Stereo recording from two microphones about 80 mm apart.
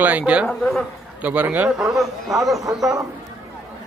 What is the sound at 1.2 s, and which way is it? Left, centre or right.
A man's voice, centre.